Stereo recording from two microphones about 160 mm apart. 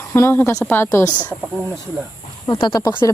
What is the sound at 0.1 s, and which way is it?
A woman's voice, 15° left (ahead or behind).